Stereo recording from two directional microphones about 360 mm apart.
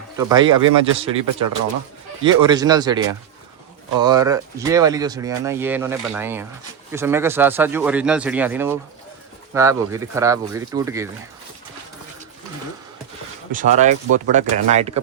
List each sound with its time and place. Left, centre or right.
0.2 s speech: centre
13.5 s speech: right